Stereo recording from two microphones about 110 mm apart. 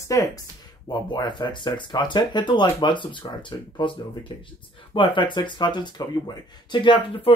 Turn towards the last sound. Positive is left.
turn(degrees=50)  # may be behind; listen again after turning